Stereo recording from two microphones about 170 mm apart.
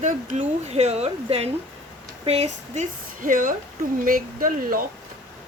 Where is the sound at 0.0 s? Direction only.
50° right (ahead or behind).